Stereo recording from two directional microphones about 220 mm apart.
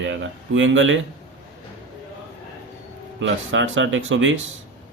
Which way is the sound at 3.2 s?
60° right (ahead or behind).